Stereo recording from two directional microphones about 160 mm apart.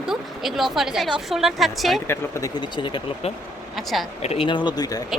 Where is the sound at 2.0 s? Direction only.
25° left (ahead or behind).